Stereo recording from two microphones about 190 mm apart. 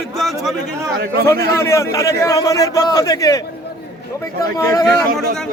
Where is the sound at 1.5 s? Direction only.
15° left (ahead or behind).